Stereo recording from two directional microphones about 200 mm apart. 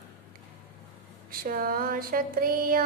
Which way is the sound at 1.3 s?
45° right (ahead or behind).